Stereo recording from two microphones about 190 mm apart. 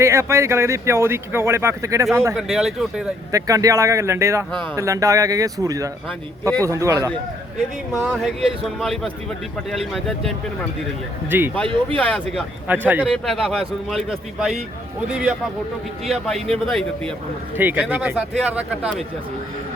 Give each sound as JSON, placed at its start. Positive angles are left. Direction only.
{"t": 0.0, "sound": "speech", "side_deg": -15}
{"t": 2.3, "sound": "a man's voice", "side_deg": 0}
{"t": 3.3, "sound": "speech", "side_deg": -20}
{"t": 7.9, "sound": "a man's voice", "side_deg": 0}
{"t": 11.3, "sound": "speech", "side_deg": -10}
{"t": 11.9, "sound": "a man's voice", "side_deg": 5}
{"t": 13.2, "sound": "a man's voice", "side_deg": 0}
{"t": 17.6, "sound": "speech", "side_deg": -10}